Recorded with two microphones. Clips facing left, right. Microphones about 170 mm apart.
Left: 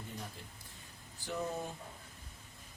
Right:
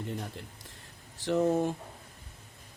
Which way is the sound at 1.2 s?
90° right.